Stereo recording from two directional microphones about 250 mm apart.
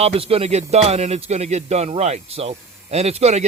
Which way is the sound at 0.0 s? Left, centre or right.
Right.